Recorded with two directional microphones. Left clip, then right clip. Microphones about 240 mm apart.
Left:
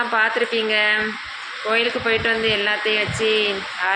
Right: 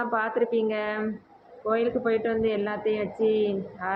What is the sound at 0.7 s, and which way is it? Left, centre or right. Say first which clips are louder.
Speech: left 11 dB; left.